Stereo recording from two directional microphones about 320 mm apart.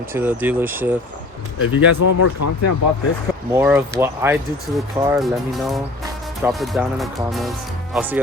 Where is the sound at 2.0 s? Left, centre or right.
Left.